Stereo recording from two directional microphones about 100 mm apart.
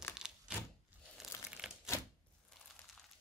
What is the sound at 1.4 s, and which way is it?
Typewriter, 10° right (ahead or behind).